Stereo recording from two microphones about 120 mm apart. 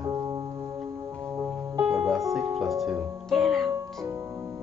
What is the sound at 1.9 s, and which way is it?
Music, centre (ahead or behind).